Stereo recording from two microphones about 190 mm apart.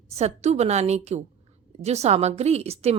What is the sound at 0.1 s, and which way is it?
Speech, 35° right (ahead or behind).